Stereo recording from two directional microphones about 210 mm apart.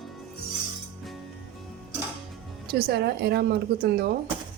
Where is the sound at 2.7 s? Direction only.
50° right (ahead or behind).